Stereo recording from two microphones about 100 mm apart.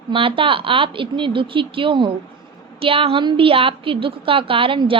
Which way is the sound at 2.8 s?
70° right (ahead or behind).